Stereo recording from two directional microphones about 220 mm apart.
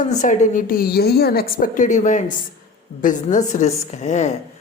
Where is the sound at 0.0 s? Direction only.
35° left (ahead or behind).